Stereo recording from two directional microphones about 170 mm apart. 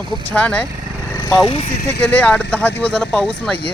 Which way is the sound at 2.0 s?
10° left (ahead or behind).